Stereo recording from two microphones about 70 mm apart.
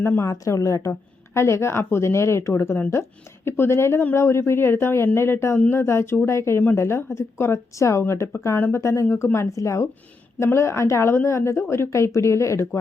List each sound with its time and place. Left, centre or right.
0.0 s a woman's voice: left
0.4 s a woman's voice: left